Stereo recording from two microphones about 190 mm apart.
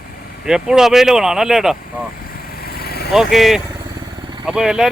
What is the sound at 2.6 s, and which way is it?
Vehicle, 55° left (ahead or behind).